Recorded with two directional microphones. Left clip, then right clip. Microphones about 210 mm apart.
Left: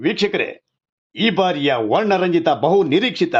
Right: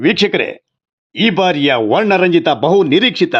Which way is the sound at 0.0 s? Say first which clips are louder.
Right 6 dB; 25° right (ahead or behind).